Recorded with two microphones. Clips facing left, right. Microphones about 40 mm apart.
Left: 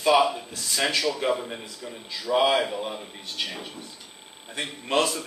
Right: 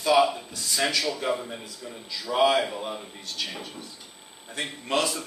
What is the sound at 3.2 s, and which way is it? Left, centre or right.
Speech, left.